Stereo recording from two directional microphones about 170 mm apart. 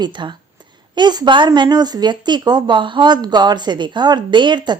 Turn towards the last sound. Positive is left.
turn(degrees=-25)  # may be behind; listen again after turning